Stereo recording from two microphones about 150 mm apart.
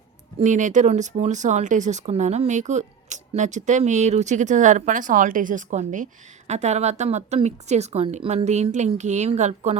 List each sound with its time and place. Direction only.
0.3 s speech: 55° right (ahead or behind)
6.5 s speech: 50° right (ahead or behind)